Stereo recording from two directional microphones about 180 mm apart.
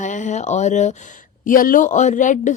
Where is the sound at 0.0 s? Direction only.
45° left (ahead or behind).